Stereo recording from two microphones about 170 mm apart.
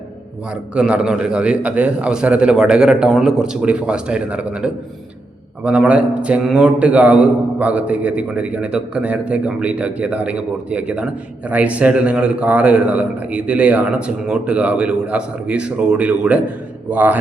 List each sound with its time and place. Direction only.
0.5 s a man's voice: 5° right (ahead or behind)